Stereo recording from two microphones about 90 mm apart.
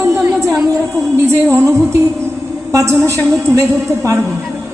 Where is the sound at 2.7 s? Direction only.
40° right (ahead or behind).